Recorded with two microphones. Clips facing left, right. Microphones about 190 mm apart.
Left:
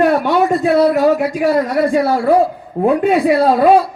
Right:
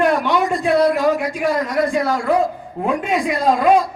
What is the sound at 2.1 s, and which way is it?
A man's voice, 35° left (ahead or behind).